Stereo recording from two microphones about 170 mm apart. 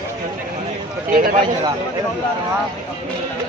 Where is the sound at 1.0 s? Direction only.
55° right (ahead or behind).